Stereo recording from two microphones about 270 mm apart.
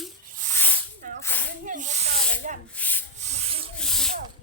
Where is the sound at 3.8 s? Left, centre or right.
Centre.